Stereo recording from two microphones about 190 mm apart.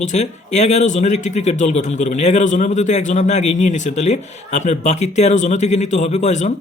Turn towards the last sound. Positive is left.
turn(degrees=40)  # may be behind; listen again after turning